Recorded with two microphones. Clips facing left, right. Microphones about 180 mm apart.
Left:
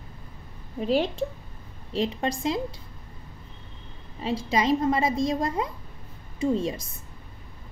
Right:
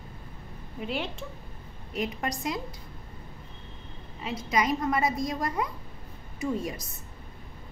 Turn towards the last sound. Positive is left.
turn(degrees=25)  # may be behind; listen again after turning